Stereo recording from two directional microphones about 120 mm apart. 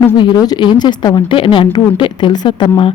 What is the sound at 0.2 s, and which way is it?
Speech, 35° left (ahead or behind).